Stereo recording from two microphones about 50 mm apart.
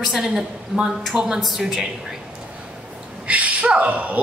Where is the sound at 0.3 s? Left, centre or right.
Centre.